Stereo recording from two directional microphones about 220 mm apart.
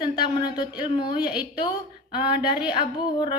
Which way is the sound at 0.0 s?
20° left (ahead or behind).